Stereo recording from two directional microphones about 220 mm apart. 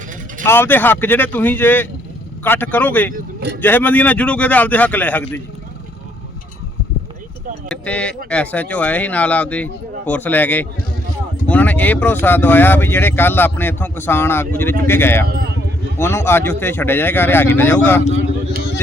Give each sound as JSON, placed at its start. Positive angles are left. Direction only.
{"t": 0.4, "sound": "speech", "side_deg": 10}
{"t": 7.7, "sound": "speech", "side_deg": 5}
{"t": 15.3, "sound": "speech", "side_deg": -45}
{"t": 16.0, "sound": "speech", "side_deg": 10}